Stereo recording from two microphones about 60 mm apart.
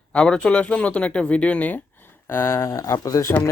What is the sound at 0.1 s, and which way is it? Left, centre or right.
Speech, centre.